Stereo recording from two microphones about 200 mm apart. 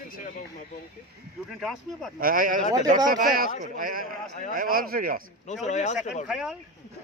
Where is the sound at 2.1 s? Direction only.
45° right (ahead or behind).